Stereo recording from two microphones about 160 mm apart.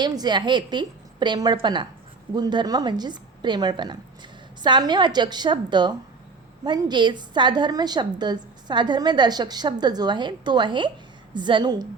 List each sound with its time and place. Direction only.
0.0 s a woman's voice: 25° right (ahead or behind)